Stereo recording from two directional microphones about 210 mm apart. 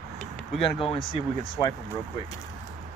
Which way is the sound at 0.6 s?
25° left (ahead or behind).